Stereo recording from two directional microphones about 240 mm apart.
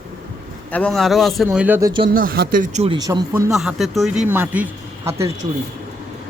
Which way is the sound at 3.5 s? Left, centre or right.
Centre.